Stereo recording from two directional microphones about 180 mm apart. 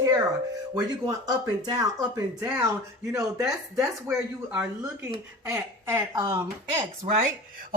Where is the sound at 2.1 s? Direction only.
15° right (ahead or behind).